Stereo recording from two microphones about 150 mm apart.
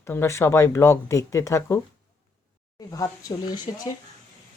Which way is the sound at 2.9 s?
25° left (ahead or behind).